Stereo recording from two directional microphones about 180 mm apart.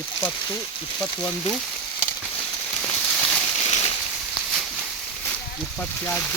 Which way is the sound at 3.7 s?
35° left (ahead or behind).